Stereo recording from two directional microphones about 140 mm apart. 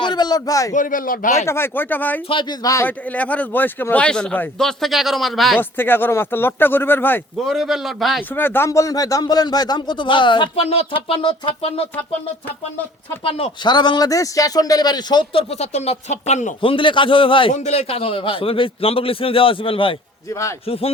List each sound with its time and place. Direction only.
0.0 s a man's voice: 30° left (ahead or behind)
0.7 s speech: 70° left (ahead or behind)
1.5 s speech: 15° left (ahead or behind)
2.3 s speech: 30° left (ahead or behind)
2.8 s speech: 10° left (ahead or behind)
5.5 s speech: 15° left (ahead or behind)
7.4 s a man's voice: centre (ahead or behind)
8.3 s speech: 15° left (ahead or behind); by 11.9 s 40° left (ahead or behind)
13.2 s speech: 40° left (ahead or behind); by 16.6 s 55° left (ahead or behind)
16.6 s speech: 35° left (ahead or behind)
17.5 s a man's voice: 55° left (ahead or behind)